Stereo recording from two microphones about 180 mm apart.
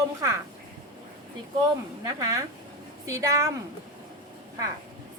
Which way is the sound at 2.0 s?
20° right (ahead or behind).